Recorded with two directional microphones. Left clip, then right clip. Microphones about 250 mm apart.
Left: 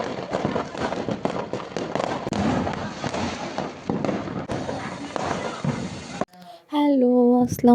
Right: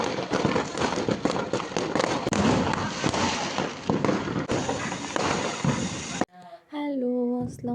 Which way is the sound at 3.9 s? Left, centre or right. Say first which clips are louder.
Right 1 dB; centre.